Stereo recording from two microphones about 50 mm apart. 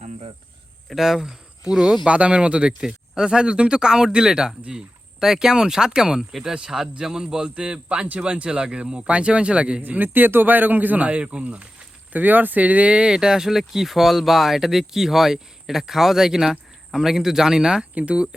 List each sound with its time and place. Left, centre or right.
0.9 s speech: centre
2.0 s a man's voice: right
9.8 s speech: right
12.1 s speech: right; by 17.8 s centre
17.9 s a man's voice: right